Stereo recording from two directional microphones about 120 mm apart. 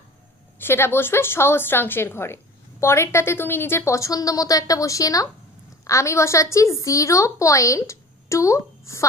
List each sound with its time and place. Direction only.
0.6 s a woman's voice: 20° left (ahead or behind)